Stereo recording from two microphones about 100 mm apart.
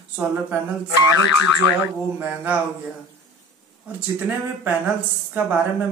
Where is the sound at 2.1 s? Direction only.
15° right (ahead or behind).